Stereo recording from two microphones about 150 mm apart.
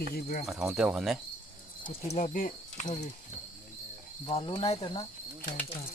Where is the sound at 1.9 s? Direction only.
45° left (ahead or behind).